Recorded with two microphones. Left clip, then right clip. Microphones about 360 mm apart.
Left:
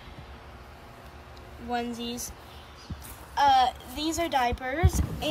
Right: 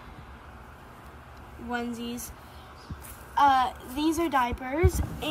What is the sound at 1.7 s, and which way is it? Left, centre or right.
Speech, centre.